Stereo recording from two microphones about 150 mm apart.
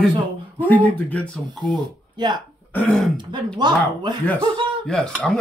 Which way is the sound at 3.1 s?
30° right (ahead or behind).